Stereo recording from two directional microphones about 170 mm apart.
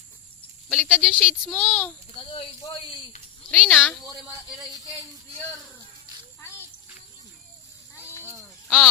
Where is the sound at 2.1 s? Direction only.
30° left (ahead or behind).